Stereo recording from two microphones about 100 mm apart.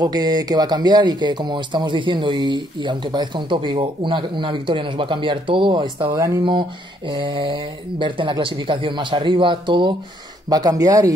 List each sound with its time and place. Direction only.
0.0 s speech: 40° right (ahead or behind)
10.5 s speech: 40° right (ahead or behind)